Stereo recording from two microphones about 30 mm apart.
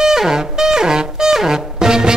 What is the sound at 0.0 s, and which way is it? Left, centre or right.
Music, centre.